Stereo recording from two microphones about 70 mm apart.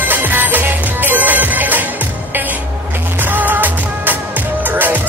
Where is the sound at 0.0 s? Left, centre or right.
Right.